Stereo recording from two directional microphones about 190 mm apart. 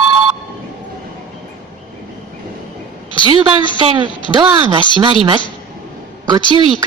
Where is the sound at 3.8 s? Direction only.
25° right (ahead or behind).